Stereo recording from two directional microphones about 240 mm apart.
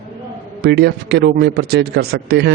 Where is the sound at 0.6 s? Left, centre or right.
Right.